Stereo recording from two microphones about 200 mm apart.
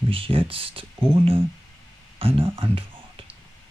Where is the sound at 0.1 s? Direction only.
25° right (ahead or behind).